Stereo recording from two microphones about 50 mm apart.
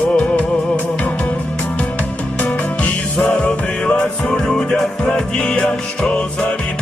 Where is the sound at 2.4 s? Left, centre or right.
Left.